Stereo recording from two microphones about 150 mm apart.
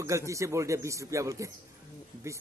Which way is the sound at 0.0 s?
20° right (ahead or behind).